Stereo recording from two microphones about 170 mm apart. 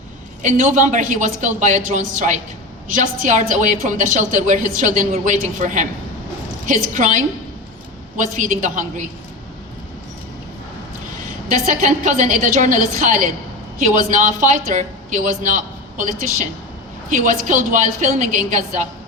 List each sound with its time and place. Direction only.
0.4 s a woman's voice: 45° right (ahead or behind)
11.6 s a woman's voice: 45° right (ahead or behind)